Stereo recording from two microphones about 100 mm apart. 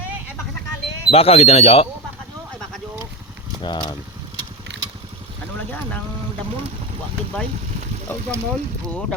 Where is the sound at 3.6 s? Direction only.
50° left (ahead or behind).